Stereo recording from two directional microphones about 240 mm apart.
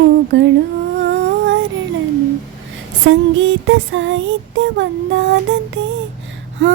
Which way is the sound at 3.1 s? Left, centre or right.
Right.